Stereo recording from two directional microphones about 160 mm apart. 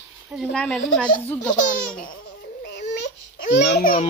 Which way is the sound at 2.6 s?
90° left.